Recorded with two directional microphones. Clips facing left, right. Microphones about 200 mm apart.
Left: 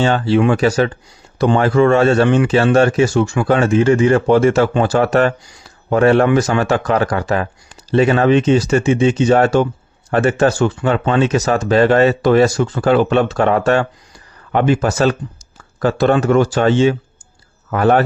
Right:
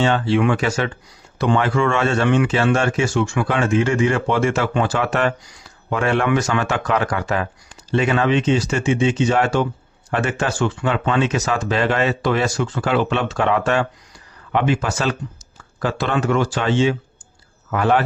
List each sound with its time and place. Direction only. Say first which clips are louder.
0.0 s speech: left 3 dB; 35° left (ahead or behind)